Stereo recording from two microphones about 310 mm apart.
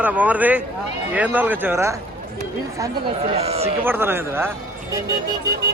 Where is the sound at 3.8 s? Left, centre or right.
Centre.